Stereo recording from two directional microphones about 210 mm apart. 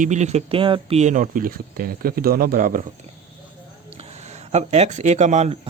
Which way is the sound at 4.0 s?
30° right (ahead or behind).